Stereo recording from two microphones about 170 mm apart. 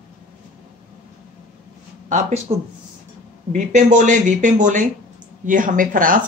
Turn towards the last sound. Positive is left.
turn(degrees=-55)  # may be behind; listen again after turning